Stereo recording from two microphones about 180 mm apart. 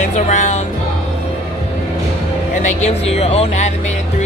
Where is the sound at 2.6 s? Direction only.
35° left (ahead or behind).